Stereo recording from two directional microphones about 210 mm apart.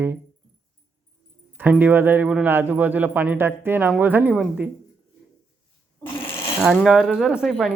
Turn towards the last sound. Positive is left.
turn(degrees=0)  # may be behind; listen again after turning